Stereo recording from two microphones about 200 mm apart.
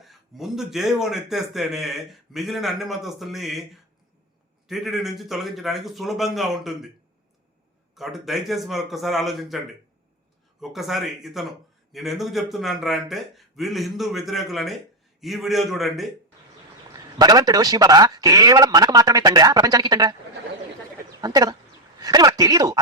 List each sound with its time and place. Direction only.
0.0 s a man's voice: centre (ahead or behind)
7.9 s a man's voice: centre (ahead or behind)
10.6 s a man's voice: centre (ahead or behind)
17.2 s a man's voice: 20° right (ahead or behind)
21.1 s a sound: 20° right (ahead or behind)
22.0 s speech: 20° right (ahead or behind)